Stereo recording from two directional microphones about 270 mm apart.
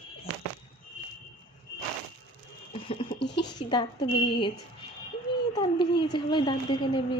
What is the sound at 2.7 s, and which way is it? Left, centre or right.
Goat, left.